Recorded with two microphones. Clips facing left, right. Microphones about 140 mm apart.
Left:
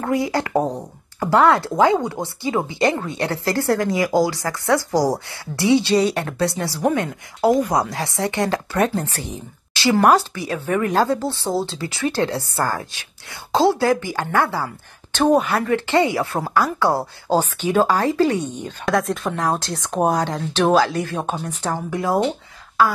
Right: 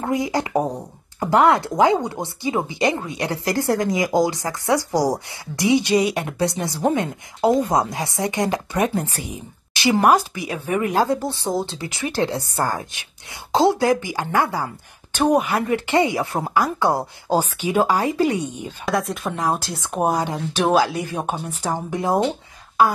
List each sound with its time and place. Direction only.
0.0 s a woman's voice: 20° right (ahead or behind)